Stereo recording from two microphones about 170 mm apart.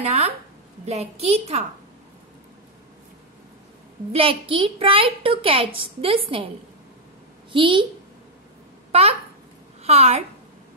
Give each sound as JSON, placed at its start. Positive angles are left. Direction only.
{"t": 0.0, "sound": "a woman's voice", "side_deg": -40}
{"t": 4.1, "sound": "a woman's voice", "side_deg": -35}
{"t": 7.5, "sound": "a woman's voice", "side_deg": -30}
{"t": 9.8, "sound": "a woman's voice", "side_deg": -40}